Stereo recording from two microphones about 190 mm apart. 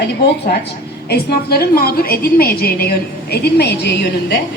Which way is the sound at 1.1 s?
55° left (ahead or behind).